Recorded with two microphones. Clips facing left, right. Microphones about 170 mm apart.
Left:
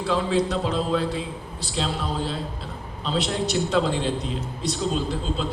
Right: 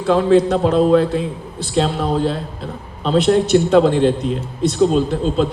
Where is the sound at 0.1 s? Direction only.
55° right (ahead or behind).